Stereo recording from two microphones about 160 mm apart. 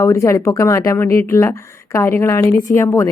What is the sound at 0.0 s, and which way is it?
A woman's voice, 20° left (ahead or behind).